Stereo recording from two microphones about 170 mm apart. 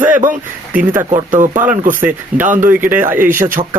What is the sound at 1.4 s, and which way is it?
Speech, 10° right (ahead or behind).